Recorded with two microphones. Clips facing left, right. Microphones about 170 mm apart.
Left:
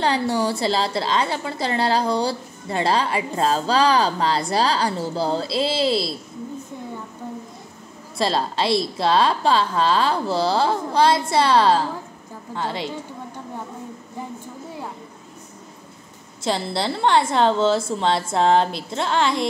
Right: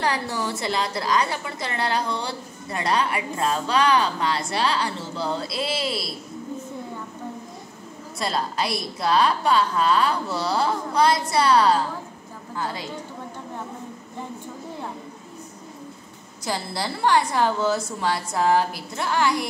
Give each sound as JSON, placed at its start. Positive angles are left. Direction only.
{"t": 0.0, "sound": "a woman's voice", "side_deg": 30}
{"t": 8.2, "sound": "a woman's voice", "side_deg": 30}
{"t": 16.4, "sound": "a woman's voice", "side_deg": 25}